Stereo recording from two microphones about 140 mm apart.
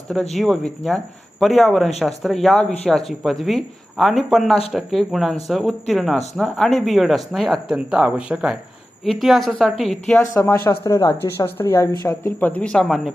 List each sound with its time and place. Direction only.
0.1 s speech: centre (ahead or behind)
10.4 s a woman's voice: 15° left (ahead or behind); by 13.1 s centre (ahead or behind)